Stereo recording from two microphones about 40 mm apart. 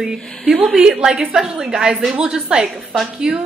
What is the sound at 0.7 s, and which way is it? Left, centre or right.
A woman's voice, centre.